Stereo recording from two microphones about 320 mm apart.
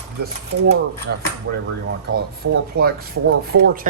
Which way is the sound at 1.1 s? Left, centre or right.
Right.